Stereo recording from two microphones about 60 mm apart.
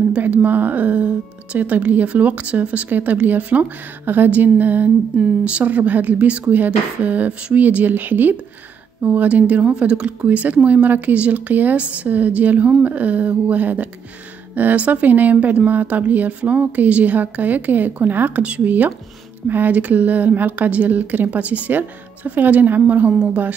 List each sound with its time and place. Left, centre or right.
0.2 s speech: right